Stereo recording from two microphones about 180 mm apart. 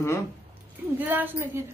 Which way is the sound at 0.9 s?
10° right (ahead or behind).